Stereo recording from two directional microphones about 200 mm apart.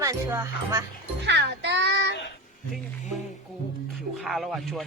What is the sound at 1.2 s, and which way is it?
Music, 60° right (ahead or behind).